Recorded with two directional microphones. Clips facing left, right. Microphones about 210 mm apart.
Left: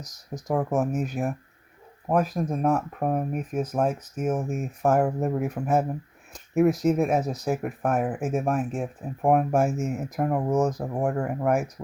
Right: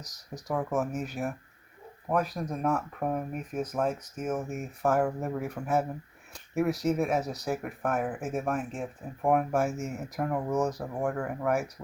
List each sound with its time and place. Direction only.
0.0 s speech: 45° left (ahead or behind)
4.9 s speech: 30° left (ahead or behind)
5.2 s speech: 45° left (ahead or behind)